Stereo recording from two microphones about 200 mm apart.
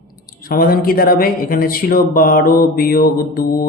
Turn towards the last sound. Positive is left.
turn(degrees=45)  # may be behind; listen again after turning